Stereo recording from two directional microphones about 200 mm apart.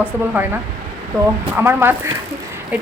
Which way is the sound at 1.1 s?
15° right (ahead or behind).